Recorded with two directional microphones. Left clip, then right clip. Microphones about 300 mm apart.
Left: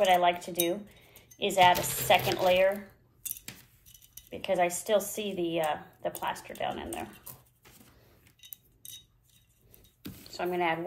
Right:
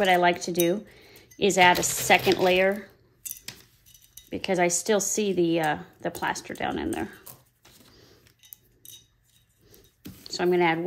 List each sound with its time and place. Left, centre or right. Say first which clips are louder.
0.0 s a woman's voice: right 3 dB; right
4.3 s a woman's voice: right 3 dB; right
10.2 s speech: right 7 dB; right